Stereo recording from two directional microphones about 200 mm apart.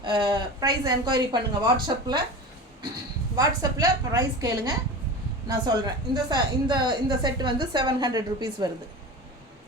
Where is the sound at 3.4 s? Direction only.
20° right (ahead or behind).